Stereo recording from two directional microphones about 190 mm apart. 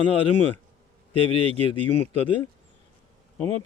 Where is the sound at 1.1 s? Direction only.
30° left (ahead or behind).